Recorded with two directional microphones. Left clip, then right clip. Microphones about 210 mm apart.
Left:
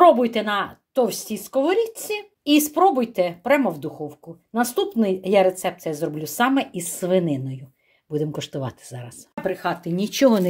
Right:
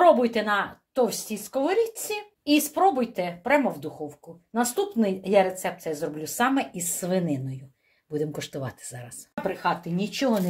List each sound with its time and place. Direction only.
0.0 s speech: 30° left (ahead or behind)